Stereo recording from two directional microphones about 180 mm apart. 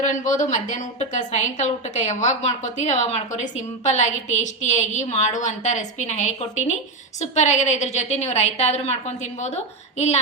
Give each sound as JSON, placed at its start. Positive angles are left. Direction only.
{"t": 0.0, "sound": "a woman's voice", "side_deg": 45}